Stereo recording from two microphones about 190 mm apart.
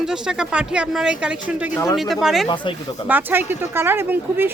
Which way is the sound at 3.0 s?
10° right (ahead or behind).